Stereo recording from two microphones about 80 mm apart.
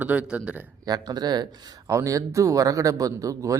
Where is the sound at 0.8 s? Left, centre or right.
Right.